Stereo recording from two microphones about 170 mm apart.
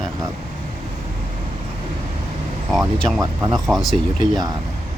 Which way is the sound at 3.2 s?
20° right (ahead or behind).